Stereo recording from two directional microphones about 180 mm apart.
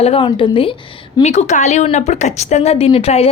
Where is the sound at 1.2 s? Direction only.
40° left (ahead or behind).